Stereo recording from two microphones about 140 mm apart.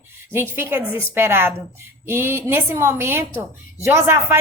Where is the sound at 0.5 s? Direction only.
15° right (ahead or behind).